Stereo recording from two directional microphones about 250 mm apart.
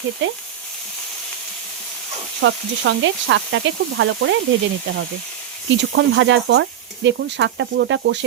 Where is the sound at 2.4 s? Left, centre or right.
Right.